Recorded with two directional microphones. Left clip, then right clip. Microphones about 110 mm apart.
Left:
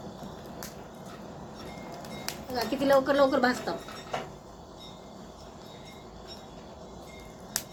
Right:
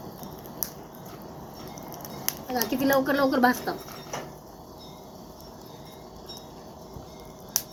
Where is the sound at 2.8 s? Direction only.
50° right (ahead or behind).